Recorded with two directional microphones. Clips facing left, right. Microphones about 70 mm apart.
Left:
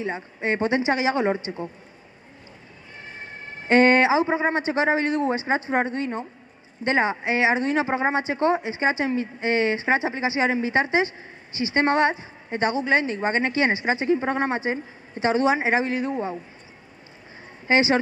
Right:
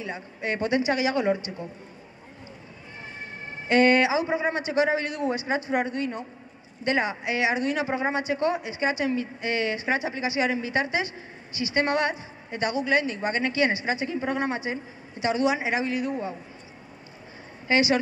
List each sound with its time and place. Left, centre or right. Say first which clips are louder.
0.0 s a woman's voice: left 5 dB; left
3.6 s speech: left 3 dB; left
17.6 s speech: left 3 dB; left